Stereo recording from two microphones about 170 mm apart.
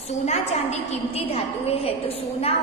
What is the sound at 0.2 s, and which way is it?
A woman's voice, 40° left (ahead or behind).